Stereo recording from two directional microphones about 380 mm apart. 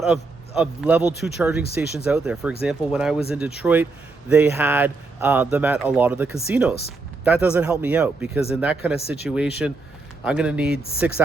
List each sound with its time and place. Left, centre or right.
0.0 s a man's voice: centre
9.0 s speech: centre
9.6 s speech: centre